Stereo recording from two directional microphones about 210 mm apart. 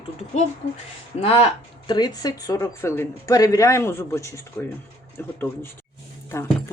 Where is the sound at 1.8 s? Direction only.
20° left (ahead or behind).